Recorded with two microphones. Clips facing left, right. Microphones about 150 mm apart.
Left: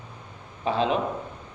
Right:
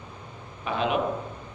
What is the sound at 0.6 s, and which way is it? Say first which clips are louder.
Speech: left 3 dB; 30° left (ahead or behind).